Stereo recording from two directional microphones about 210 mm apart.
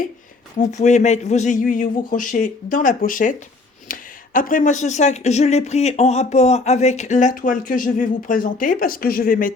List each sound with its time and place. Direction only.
0.6 s speech: 35° left (ahead or behind)